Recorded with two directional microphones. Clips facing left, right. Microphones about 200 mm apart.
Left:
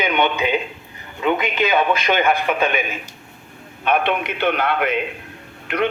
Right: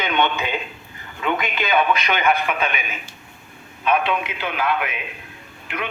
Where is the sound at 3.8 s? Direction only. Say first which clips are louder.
Left 1 dB; 60° left (ahead or behind).